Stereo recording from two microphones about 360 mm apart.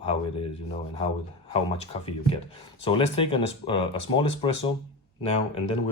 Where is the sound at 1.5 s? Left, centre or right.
Centre.